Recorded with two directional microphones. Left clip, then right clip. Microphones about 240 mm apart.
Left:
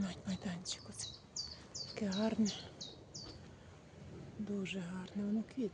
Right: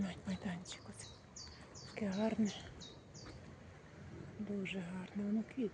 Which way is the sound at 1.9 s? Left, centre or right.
Centre.